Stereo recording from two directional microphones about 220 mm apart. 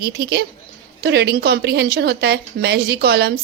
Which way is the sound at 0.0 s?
45° right (ahead or behind).